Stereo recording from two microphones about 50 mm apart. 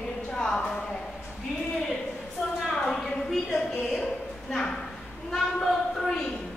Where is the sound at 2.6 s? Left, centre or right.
Centre.